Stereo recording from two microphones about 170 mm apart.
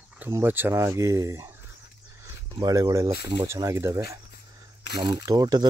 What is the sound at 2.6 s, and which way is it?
Speech, 20° right (ahead or behind).